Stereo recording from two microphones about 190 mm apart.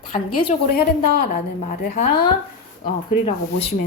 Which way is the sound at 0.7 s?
55° left (ahead or behind).